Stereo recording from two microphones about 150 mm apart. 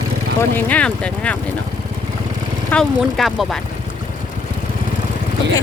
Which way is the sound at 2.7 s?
Centre (ahead or behind).